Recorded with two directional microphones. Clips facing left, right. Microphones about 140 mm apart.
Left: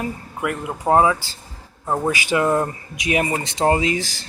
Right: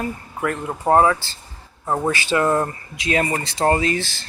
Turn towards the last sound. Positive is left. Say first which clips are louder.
# even
turn(degrees=15)  # may be behind; listen again after turning